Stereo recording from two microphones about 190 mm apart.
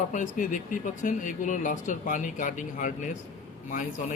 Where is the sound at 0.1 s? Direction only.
40° left (ahead or behind).